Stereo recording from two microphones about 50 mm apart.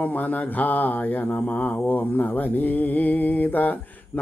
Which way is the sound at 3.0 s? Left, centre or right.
Left.